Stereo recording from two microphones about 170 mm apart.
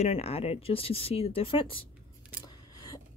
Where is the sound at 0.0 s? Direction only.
35° left (ahead or behind).